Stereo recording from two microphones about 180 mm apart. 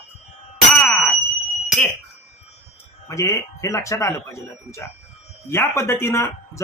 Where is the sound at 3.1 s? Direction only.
15° left (ahead or behind).